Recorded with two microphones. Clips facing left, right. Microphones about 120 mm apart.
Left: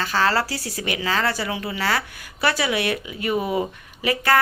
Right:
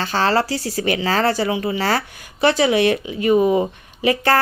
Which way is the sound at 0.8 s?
35° right (ahead or behind).